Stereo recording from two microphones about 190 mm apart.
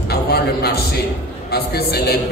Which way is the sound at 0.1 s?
55° left (ahead or behind).